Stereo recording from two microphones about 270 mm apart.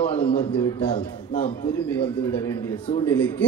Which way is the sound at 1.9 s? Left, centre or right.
Centre.